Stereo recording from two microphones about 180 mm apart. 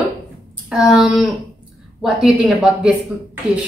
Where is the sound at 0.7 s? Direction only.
5° right (ahead or behind).